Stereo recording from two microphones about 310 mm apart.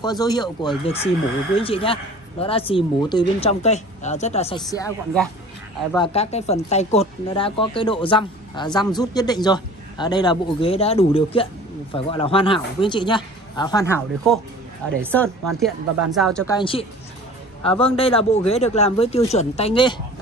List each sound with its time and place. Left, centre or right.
0.0 s speech: centre
4.7 s speech: centre
5.9 s speech: centre
16.5 s speech: centre